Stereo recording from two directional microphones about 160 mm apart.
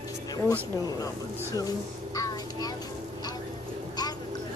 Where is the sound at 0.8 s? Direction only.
20° left (ahead or behind).